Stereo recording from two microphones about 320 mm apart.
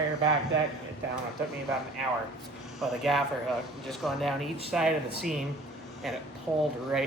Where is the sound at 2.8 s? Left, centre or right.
Centre.